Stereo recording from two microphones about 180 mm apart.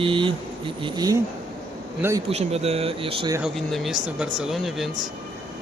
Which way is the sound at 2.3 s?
35° right (ahead or behind).